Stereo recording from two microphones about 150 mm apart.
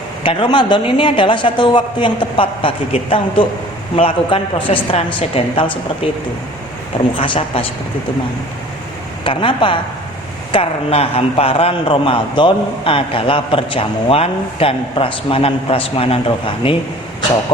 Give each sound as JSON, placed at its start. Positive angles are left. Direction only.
{"t": 0.2, "sound": "a man's voice", "side_deg": 35}
{"t": 7.2, "sound": "a man's voice", "side_deg": 40}
{"t": 9.2, "sound": "a man's voice", "side_deg": 35}